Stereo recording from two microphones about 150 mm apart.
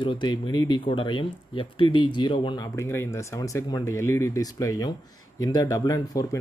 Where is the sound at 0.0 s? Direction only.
30° left (ahead or behind).